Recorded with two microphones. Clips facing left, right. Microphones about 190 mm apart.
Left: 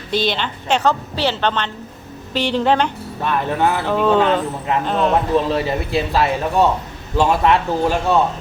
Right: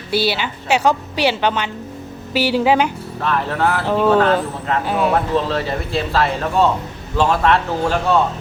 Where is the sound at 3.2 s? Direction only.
15° left (ahead or behind).